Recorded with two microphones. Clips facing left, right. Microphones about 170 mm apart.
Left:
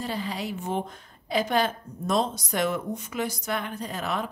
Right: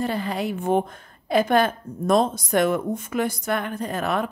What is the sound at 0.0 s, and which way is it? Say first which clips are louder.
A woman's voice: right 6 dB; 55° right (ahead or behind).